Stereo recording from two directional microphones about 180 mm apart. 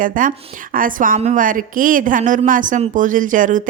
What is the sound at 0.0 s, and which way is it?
Speech, 50° right (ahead or behind).